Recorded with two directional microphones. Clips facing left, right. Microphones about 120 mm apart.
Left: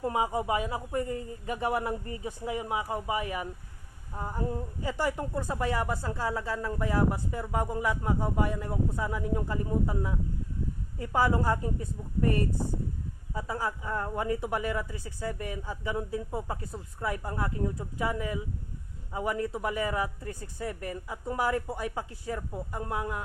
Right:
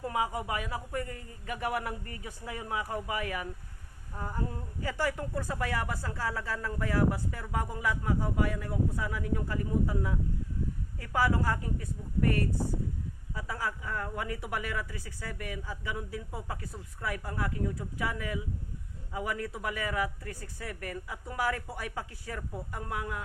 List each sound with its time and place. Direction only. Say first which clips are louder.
0.0 s a woman's voice: left 3 dB; 25° left (ahead or behind)